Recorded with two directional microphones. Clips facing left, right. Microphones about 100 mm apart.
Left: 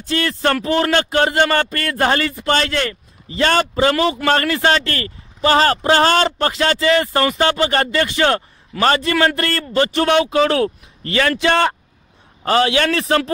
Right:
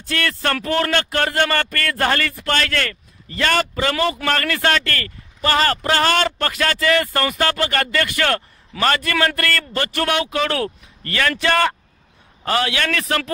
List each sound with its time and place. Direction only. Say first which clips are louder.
0.0 s speech: left 4 dB; 20° left (ahead or behind)